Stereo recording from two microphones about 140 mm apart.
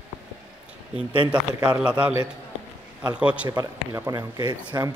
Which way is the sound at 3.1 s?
10° right (ahead or behind).